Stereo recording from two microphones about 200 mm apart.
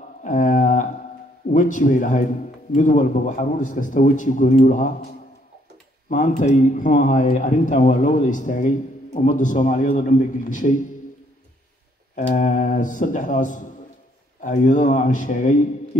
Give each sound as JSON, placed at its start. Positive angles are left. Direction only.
{"t": 0.2, "sound": "a sound", "side_deg": 40}
{"t": 1.5, "sound": "a man's voice", "side_deg": 40}
{"t": 12.3, "sound": "a man's voice", "side_deg": 40}